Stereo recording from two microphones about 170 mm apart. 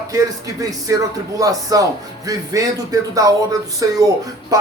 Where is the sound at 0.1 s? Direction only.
20° right (ahead or behind).